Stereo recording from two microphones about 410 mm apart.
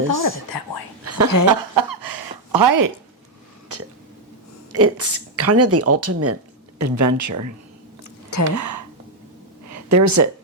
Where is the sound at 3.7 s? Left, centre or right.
Right.